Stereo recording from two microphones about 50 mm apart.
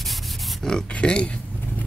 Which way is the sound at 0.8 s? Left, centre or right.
Left.